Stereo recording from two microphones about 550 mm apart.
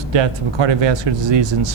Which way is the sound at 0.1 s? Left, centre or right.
Right.